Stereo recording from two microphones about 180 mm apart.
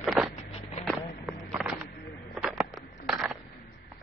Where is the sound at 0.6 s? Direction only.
35° left (ahead or behind).